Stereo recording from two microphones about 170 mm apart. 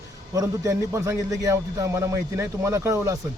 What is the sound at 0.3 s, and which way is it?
A man's voice, 20° right (ahead or behind).